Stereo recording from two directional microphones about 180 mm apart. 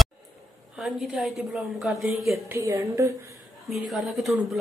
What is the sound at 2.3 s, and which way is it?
Speech, 15° right (ahead or behind).